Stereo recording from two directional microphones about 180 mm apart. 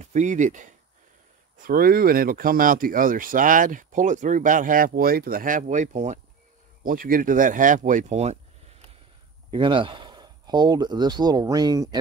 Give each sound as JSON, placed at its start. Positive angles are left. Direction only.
{"t": 0.0, "sound": "speech", "side_deg": -40}
{"t": 9.5, "sound": "speech", "side_deg": -25}